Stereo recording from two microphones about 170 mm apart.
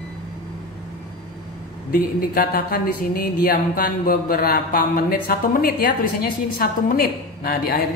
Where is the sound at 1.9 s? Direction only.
60° left (ahead or behind).